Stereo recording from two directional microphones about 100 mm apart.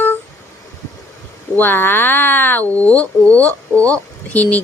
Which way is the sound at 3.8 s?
15° left (ahead or behind).